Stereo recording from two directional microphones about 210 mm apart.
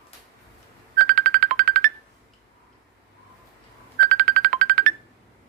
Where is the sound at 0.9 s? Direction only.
40° right (ahead or behind).